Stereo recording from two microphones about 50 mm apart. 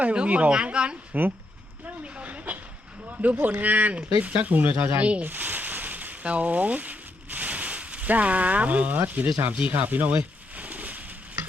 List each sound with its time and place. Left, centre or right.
0.0 s speech: right
1.1 s speech: right
2.1 s a sound: right
3.2 s speech: right
5.2 s a sound: right
9.6 s pigeon: right